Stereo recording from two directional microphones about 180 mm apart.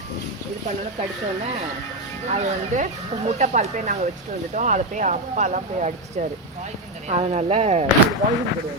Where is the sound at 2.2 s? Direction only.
40° right (ahead or behind).